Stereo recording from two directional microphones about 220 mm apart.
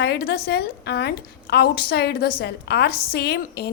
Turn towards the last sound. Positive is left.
turn(degrees=45)  # may be behind; listen again after turning